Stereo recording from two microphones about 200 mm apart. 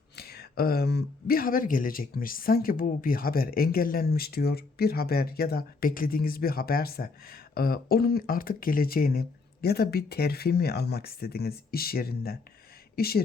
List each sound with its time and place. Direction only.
0.2 s speech: 50° left (ahead or behind)